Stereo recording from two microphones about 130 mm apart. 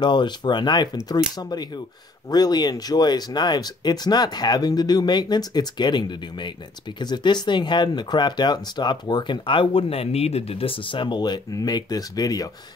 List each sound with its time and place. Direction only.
0.0 s speech: 35° left (ahead or behind)